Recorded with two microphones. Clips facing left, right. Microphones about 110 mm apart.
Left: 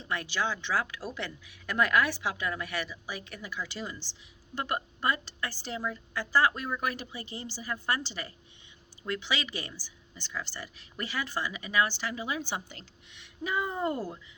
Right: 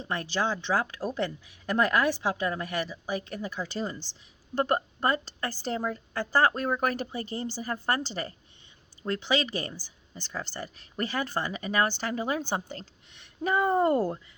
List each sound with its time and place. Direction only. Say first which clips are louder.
0.1 s speech: right 3 dB; 40° right (ahead or behind); by 14.3 s 55° right (ahead or behind)